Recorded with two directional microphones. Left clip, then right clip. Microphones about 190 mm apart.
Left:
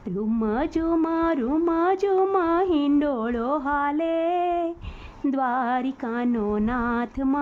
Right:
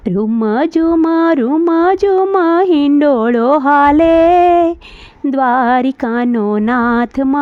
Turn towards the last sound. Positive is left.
turn(degrees=-45)  # may be behind; listen again after turning